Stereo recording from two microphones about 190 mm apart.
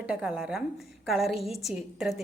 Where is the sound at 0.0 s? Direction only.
5° right (ahead or behind).